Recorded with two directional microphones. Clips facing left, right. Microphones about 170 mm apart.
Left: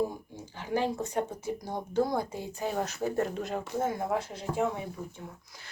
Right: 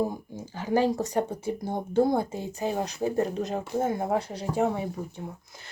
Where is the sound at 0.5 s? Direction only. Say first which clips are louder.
Right 6 dB; 40° right (ahead or behind).